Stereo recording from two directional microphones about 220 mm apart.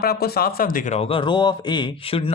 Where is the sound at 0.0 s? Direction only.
45° left (ahead or behind).